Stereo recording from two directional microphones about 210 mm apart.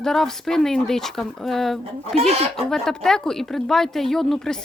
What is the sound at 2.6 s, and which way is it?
Speech, centre (ahead or behind).